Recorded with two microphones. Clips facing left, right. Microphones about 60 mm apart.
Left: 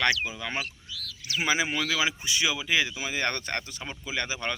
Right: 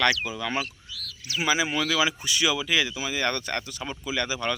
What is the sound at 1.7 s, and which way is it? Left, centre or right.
Speech, left.